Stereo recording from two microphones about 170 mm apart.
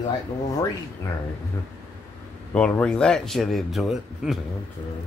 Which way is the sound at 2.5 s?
5° left (ahead or behind).